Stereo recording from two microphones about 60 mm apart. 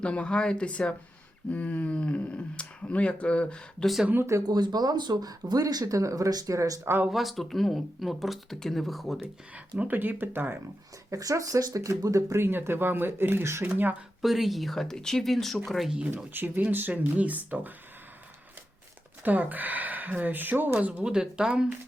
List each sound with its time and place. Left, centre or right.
0.0 s speech: centre
4.3 s speech: right
7.1 s speech: centre
9.7 s speech: right
11.1 s speech: right
12.4 s speech: right
14.2 s speech: centre
16.1 s speech: right
19.2 s speech: right
21.0 s speech: centre